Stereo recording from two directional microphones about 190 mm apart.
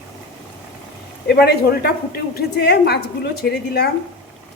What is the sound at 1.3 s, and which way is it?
A woman's voice, 60° left (ahead or behind).